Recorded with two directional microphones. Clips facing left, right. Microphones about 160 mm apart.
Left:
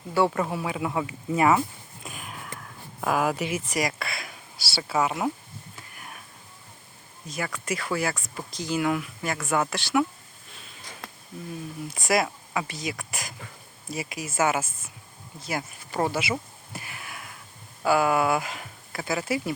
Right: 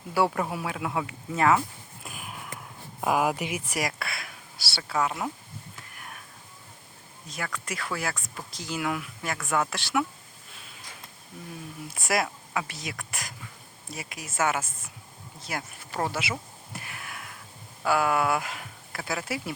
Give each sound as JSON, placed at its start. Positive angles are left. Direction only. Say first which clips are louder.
{"t": 0.1, "sound": "speech", "louder": "left 2 dB", "side_deg": -5}
{"t": 2.0, "sound": "a sound", "louder": "left 1 dB", "side_deg": -5}
{"t": 3.0, "sound": "speech", "louder": "even", "side_deg": -10}
{"t": 7.3, "sound": "speech", "louder": "left 4 dB", "side_deg": 5}
{"t": 11.0, "sound": "a sound", "louder": "left 7 dB", "side_deg": 85}
{"t": 11.9, "sound": "speech", "louder": "left 3 dB", "side_deg": 0}